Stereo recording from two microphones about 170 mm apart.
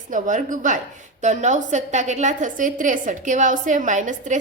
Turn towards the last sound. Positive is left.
turn(degrees=-45)  # may be behind; listen again after turning